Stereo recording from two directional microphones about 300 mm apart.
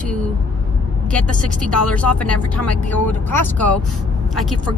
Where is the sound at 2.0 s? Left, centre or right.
Centre.